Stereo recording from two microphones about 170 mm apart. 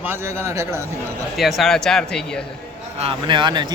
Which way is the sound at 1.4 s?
Centre (ahead or behind).